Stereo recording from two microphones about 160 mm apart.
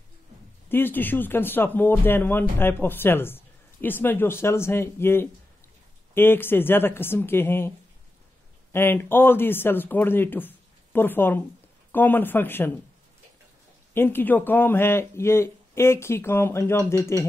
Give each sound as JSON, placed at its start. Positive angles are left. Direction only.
{"t": 0.7, "sound": "speech", "side_deg": 10}
{"t": 8.7, "sound": "speech", "side_deg": 15}
{"t": 13.9, "sound": "speech", "side_deg": 15}